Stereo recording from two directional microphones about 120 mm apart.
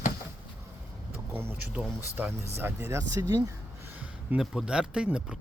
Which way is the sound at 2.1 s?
20° right (ahead or behind).